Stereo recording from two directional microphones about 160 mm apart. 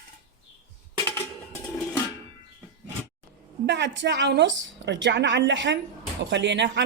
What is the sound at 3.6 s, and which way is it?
Speech, 90° right.